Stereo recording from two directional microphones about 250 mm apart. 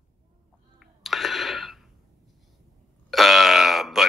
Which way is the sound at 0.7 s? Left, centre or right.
Centre.